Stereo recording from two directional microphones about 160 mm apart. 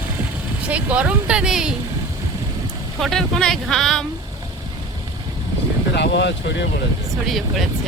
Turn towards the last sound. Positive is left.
turn(degrees=0)  # may be behind; listen again after turning